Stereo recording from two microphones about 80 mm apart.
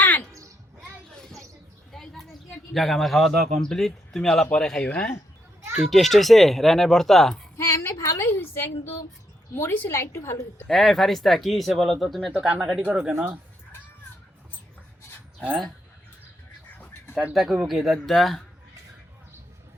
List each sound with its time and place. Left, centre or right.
0.0 s a sound: centre
1.9 s a sound: centre
2.7 s a man's voice: centre
5.8 s a man's voice: centre
7.5 s a sound: left
9.6 s a woman's voice: left
10.7 s a man's voice: centre
12.3 s speech: centre
17.3 s a man's voice: centre